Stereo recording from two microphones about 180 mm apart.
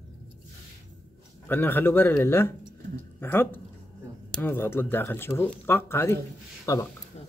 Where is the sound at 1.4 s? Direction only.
10° left (ahead or behind).